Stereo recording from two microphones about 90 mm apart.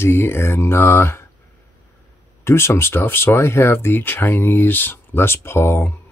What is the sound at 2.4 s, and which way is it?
Speech, 30° left (ahead or behind).